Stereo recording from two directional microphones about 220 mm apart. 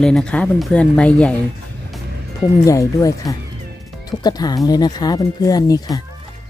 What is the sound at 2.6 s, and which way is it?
Speech, 15° left (ahead or behind).